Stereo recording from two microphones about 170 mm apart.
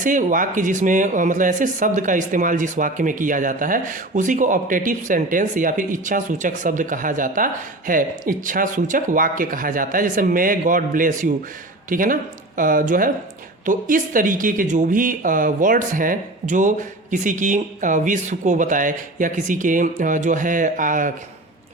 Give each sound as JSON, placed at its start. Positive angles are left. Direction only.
{"t": 0.0, "sound": "speech", "side_deg": -50}